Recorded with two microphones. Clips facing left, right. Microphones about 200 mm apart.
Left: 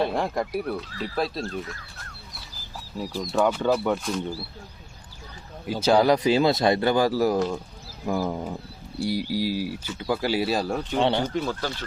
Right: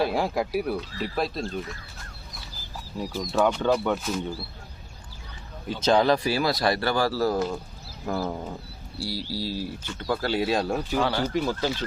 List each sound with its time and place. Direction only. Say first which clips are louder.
0.0 s speech: even; 5° right (ahead or behind)
3.0 s speech: even; centre (ahead or behind)
5.8 s speech: left 2 dB; 10° left (ahead or behind)
10.9 s speech: left 4 dB; 25° left (ahead or behind)
11.2 s speech: right 1 dB; 10° right (ahead or behind)